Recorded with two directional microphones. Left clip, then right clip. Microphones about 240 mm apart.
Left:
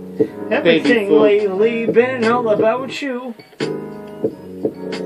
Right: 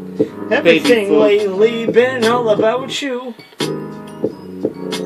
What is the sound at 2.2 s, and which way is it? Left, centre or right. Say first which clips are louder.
Speech: right 1 dB; centre.